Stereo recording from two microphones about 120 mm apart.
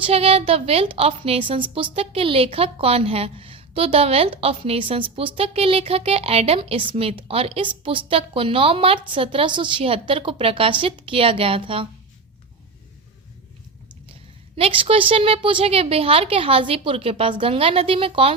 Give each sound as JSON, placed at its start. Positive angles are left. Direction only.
{"t": 0.0, "sound": "a woman's voice", "side_deg": -55}
{"t": 14.1, "sound": "a woman's voice", "side_deg": -50}